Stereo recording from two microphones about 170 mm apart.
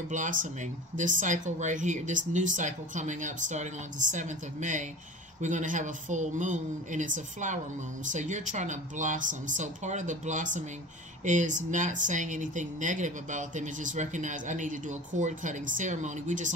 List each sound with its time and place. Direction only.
0.1 s speech: 50° right (ahead or behind)